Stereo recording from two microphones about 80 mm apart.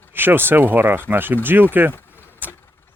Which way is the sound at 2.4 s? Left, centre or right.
Right.